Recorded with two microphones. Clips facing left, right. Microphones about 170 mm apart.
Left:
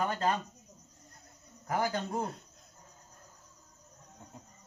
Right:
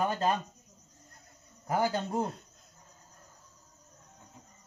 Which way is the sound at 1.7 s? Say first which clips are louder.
Right 3 dB; 25° right (ahead or behind).